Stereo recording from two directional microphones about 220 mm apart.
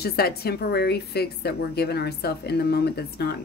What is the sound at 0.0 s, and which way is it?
A woman's voice, 45° left (ahead or behind).